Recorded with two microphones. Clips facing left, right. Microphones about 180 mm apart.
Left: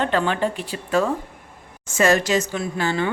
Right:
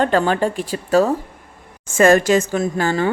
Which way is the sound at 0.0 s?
40° right (ahead or behind).